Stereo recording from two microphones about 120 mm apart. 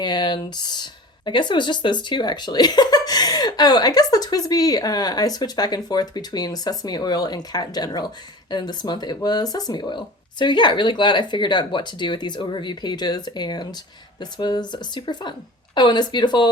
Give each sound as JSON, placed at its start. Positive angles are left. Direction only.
{"t": 0.0, "sound": "speech", "side_deg": 40}